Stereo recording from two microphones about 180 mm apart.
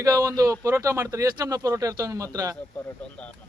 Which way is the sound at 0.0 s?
20° right (ahead or behind).